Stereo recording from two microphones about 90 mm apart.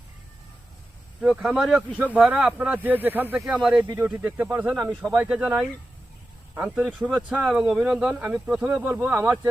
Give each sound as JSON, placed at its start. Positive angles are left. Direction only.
{"t": 1.2, "sound": "speech", "side_deg": -10}
{"t": 3.4, "sound": "speech", "side_deg": -5}
{"t": 3.9, "sound": "speech", "side_deg": -20}
{"t": 4.8, "sound": "speech", "side_deg": 5}
{"t": 5.3, "sound": "speech", "side_deg": -10}
{"t": 6.7, "sound": "speech", "side_deg": -15}